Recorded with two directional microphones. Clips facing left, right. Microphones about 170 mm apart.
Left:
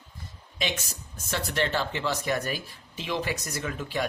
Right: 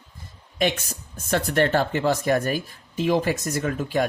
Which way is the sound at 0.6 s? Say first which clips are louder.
Right 8 dB; 50° right (ahead or behind).